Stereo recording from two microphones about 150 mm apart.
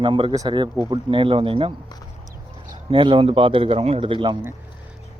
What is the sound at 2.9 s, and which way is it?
A man's voice, 35° right (ahead or behind).